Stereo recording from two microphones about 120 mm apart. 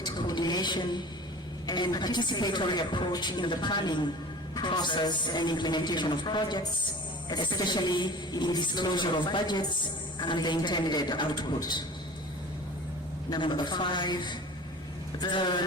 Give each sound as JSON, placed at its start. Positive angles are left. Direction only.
{"t": 0.0, "sound": "a sound", "side_deg": 40}
{"t": 1.6, "sound": "a woman's voice", "side_deg": 35}
{"t": 13.3, "sound": "a woman's voice", "side_deg": 40}